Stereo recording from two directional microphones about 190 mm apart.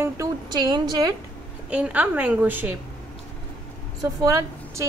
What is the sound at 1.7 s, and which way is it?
A woman's voice, 5° right (ahead or behind).